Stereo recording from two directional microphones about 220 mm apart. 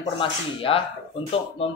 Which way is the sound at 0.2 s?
25° left (ahead or behind).